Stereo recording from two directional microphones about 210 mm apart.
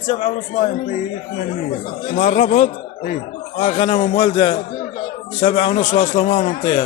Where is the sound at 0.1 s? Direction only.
35° left (ahead or behind).